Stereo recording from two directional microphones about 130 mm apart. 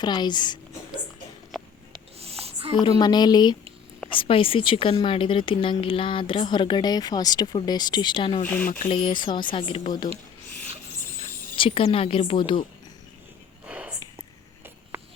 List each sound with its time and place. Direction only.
0.0 s speech: 35° left (ahead or behind)
2.1 s a sound: 50° right (ahead or behind)
3.0 s speech: 35° left (ahead or behind)
11.5 s a woman's voice: 45° left (ahead or behind)
13.7 s whispering: 10° right (ahead or behind)